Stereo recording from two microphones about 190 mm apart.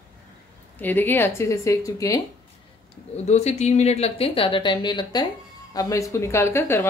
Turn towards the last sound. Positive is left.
turn(degrees=15)  # may be behind; listen again after turning